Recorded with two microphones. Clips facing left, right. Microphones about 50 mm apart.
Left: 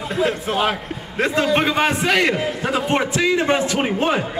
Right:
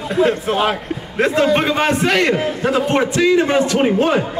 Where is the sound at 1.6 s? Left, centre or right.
Centre.